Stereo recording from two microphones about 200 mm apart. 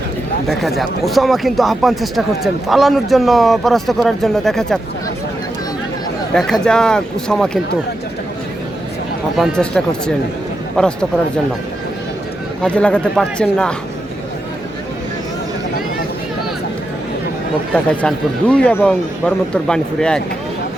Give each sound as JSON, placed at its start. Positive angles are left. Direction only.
{"t": 0.6, "sound": "speech", "side_deg": 0}
{"t": 6.3, "sound": "speech", "side_deg": 5}
{"t": 9.4, "sound": "speech", "side_deg": 5}
{"t": 12.6, "sound": "speech", "side_deg": 5}
{"t": 18.0, "sound": "speech", "side_deg": 5}